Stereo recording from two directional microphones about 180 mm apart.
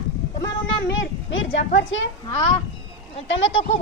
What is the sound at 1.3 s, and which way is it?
Speech, 90° left.